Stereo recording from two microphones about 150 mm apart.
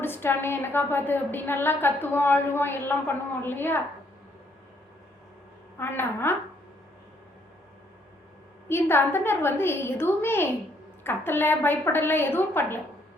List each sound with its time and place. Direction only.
0.0 s a woman's voice: 15° left (ahead or behind)
5.8 s a woman's voice: 15° left (ahead or behind)
8.7 s a woman's voice: 15° left (ahead or behind)